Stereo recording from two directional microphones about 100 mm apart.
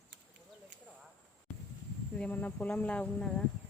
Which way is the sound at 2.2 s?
15° left (ahead or behind).